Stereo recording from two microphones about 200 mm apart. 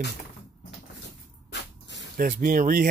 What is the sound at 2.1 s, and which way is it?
Speech, 45° right (ahead or behind).